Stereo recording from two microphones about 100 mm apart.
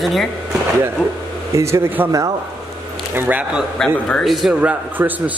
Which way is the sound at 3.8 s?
5° left (ahead or behind).